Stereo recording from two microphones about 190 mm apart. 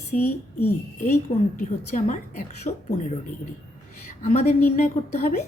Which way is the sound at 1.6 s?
40° left (ahead or behind).